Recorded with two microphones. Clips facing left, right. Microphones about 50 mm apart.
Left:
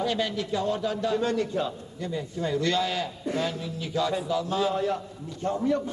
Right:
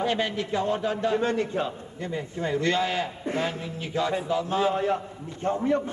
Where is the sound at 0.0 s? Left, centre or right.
Right.